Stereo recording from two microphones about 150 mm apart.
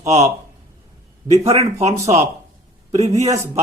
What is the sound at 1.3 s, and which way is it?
Speech, 45° right (ahead or behind).